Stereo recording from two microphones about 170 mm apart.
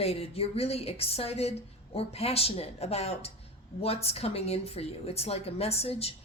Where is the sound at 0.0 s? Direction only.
35° left (ahead or behind).